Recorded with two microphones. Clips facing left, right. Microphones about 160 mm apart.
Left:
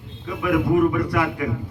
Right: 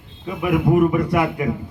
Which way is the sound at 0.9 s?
20° right (ahead or behind).